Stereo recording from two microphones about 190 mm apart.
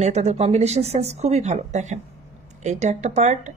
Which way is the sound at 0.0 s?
35° right (ahead or behind).